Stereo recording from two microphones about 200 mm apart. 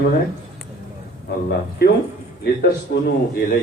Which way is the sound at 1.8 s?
50° left (ahead or behind).